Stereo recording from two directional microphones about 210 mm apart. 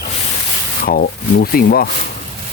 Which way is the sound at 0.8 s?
45° left (ahead or behind).